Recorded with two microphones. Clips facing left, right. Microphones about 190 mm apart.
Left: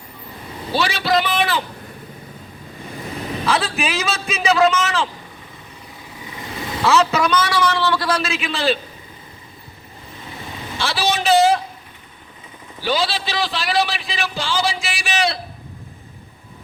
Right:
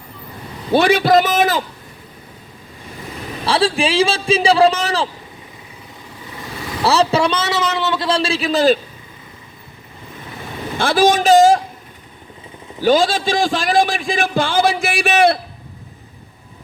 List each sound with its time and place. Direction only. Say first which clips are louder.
0.7 s a man's voice: right 7 dB; 55° right (ahead or behind)
3.4 s a man's voice: right 5 dB; 30° right (ahead or behind)
6.8 s a man's voice: right 2 dB; 35° right (ahead or behind)
10.8 s a man's voice: right 8 dB; 50° right (ahead or behind)
12.8 s a man's voice: right 7 dB; 45° right (ahead or behind)